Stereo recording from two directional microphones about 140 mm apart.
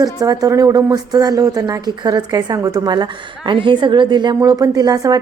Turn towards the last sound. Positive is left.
turn(degrees=-25)  # may be behind; listen again after turning